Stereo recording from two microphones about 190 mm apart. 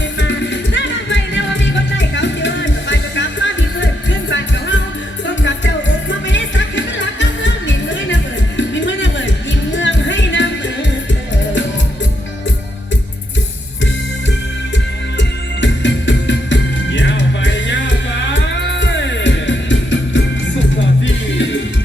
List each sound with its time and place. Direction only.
0.2 s music: 70° left (ahead or behind)
5.2 s music: 70° left (ahead or behind)
15.2 s music: 70° left (ahead or behind)